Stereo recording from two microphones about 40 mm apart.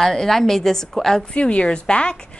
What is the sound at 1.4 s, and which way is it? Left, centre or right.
Speech, left.